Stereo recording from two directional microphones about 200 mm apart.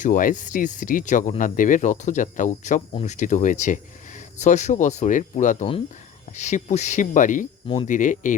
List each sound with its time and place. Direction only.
0.0 s speech: 45° left (ahead or behind)